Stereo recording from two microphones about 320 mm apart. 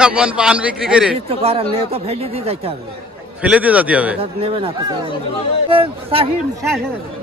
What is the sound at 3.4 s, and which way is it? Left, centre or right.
Speech, centre.